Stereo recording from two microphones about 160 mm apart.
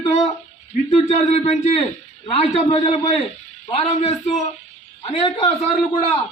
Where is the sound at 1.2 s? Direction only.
40° left (ahead or behind).